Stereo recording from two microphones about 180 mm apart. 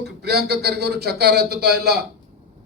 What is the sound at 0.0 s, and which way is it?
Speech, 65° right (ahead or behind).